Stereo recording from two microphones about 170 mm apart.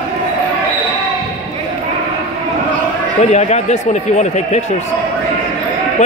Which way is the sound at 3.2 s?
45° left (ahead or behind).